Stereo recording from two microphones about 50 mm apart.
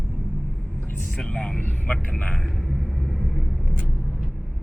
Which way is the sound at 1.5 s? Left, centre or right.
Left.